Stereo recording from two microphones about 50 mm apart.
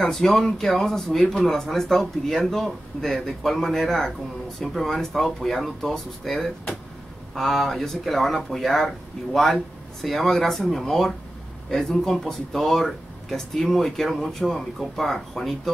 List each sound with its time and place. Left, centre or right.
0.0 s speech: centre